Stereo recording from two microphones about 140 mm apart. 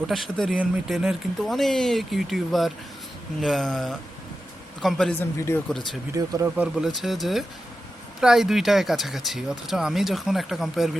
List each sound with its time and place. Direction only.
0.1 s speech: centre (ahead or behind)
5.2 s speech: 15° left (ahead or behind)
5.6 s speech: centre (ahead or behind)
6.1 s speech: 25° right (ahead or behind)
6.6 s speech: 5° right (ahead or behind)